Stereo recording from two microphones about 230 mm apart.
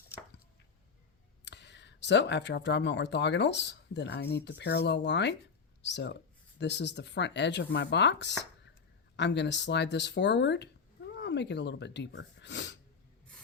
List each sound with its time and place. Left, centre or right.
1.5 s speech: left